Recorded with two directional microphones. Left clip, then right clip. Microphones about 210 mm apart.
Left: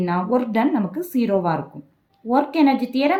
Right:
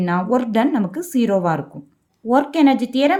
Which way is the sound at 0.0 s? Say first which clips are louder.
Right 2 dB; 40° right (ahead or behind).